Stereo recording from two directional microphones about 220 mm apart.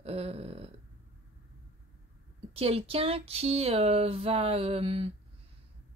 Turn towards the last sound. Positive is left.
turn(degrees=-25)  # may be behind; listen again after turning